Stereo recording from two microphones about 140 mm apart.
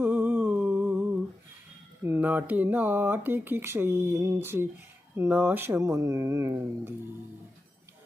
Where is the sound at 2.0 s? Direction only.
15° right (ahead or behind).